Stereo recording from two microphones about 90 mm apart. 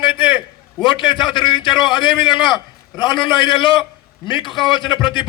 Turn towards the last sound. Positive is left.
turn(degrees=60)  # may be behind; listen again after turning